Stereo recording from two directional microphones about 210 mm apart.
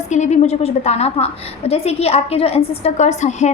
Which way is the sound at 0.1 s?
35° left (ahead or behind).